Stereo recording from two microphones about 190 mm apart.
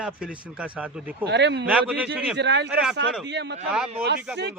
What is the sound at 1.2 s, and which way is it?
Speech, 65° right (ahead or behind).